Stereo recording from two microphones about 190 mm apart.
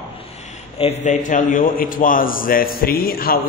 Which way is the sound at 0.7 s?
35° left (ahead or behind).